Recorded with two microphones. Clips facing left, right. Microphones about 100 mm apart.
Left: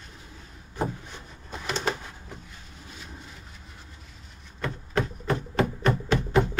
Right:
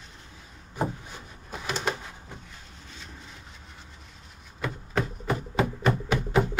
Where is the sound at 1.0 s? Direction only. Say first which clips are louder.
Even; 5° right (ahead or behind).